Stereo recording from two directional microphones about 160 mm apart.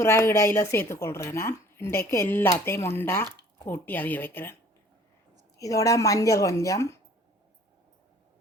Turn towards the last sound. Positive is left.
turn(degrees=20)  # may be behind; listen again after turning